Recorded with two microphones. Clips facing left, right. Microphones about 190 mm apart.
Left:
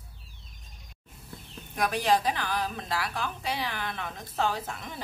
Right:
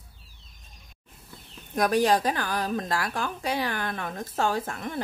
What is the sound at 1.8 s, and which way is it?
A woman's voice, 45° right (ahead or behind).